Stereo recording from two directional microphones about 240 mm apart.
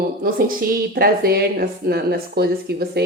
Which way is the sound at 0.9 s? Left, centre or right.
Right.